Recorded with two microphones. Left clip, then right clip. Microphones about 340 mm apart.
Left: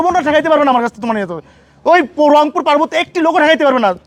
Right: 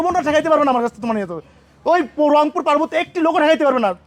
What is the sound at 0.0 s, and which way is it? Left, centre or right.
Speech, left.